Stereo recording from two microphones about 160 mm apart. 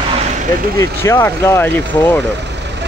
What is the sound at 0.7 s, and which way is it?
Speech, 20° left (ahead or behind).